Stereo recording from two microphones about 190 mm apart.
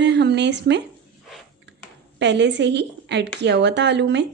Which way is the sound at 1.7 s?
65° right (ahead or behind).